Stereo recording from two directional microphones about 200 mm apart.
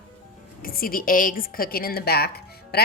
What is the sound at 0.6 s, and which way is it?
A woman's voice, 45° left (ahead or behind).